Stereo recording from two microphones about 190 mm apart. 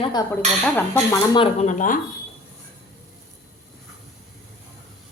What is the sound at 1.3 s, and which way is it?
Speech, 35° left (ahead or behind).